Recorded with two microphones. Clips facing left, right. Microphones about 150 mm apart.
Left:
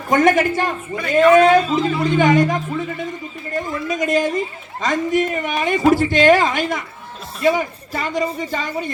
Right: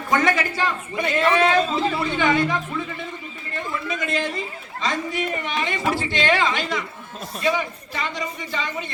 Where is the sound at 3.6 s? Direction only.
40° left (ahead or behind).